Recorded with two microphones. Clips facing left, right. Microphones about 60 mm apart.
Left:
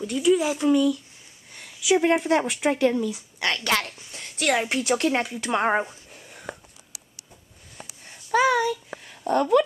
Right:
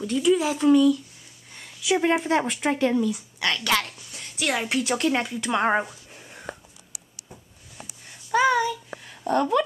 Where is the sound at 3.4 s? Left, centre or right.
Left.